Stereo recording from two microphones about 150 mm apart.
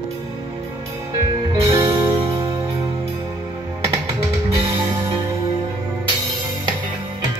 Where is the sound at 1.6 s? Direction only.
20° right (ahead or behind).